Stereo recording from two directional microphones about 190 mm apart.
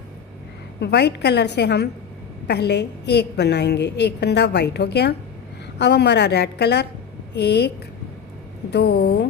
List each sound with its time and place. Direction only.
0.7 s a woman's voice: 60° left (ahead or behind)